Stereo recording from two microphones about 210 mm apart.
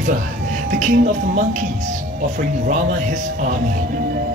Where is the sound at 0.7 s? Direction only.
35° right (ahead or behind).